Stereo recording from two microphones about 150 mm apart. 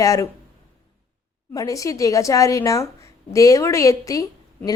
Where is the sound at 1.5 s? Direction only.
25° left (ahead or behind).